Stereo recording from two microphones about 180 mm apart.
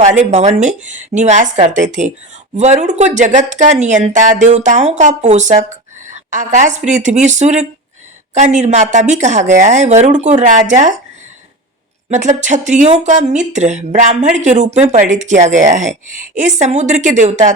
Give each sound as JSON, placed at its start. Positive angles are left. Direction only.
{"t": 0.3, "sound": "speech", "side_deg": -40}
{"t": 12.1, "sound": "speech", "side_deg": -40}